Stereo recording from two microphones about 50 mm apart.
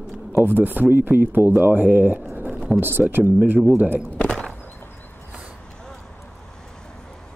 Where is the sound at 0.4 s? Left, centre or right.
Right.